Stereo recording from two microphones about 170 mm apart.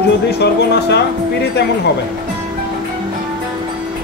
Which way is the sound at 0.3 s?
75° left (ahead or behind).